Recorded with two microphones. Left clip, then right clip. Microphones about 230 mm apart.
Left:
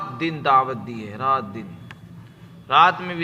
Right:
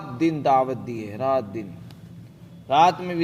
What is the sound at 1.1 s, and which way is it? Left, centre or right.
Speech, centre.